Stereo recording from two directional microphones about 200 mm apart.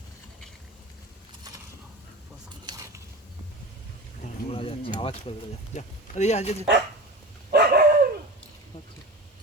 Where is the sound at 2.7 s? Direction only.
20° right (ahead or behind).